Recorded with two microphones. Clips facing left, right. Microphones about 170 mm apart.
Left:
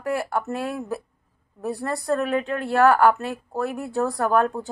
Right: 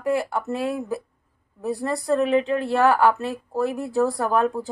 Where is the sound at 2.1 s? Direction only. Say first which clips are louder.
Right 6 dB; 30° right (ahead or behind).